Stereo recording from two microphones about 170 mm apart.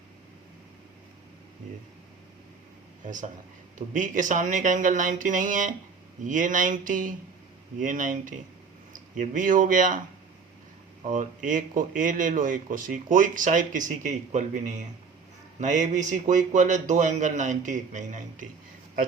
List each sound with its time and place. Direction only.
3.0 s speech: 50° right (ahead or behind)
11.0 s speech: 45° right (ahead or behind)